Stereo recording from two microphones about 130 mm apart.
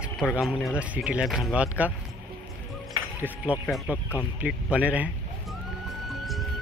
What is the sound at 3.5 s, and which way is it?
Speech, 10° right (ahead or behind).